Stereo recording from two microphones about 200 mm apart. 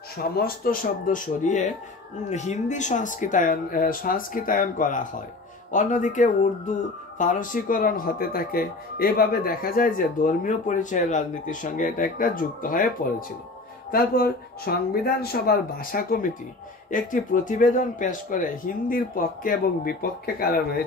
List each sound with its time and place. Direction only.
0.2 s speech: 45° left (ahead or behind)
13.9 s speech: 50° left (ahead or behind)